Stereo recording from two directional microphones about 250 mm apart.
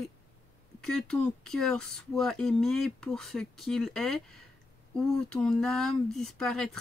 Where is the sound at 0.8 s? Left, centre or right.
Centre.